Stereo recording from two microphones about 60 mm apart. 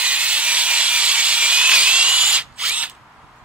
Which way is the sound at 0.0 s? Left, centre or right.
Right.